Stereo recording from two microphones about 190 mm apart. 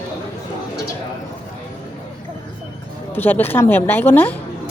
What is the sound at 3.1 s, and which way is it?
A woman's voice, 10° left (ahead or behind).